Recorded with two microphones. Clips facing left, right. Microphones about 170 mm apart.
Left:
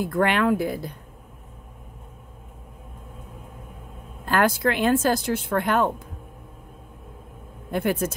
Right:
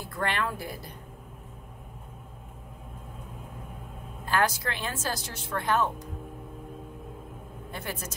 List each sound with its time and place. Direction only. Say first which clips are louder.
0.1 s speech: left 8 dB; 60° left (ahead or behind)
4.3 s speech: left 6 dB; 55° left (ahead or behind)
7.7 s speech: left 14 dB; 55° left (ahead or behind)